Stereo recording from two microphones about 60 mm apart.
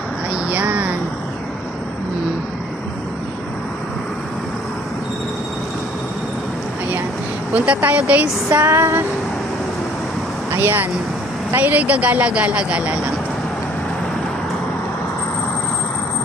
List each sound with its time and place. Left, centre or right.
0.5 s a sound: right
7.5 s speech: right
8.6 s female singing: right
10.5 s speech: right
11.5 s speech: right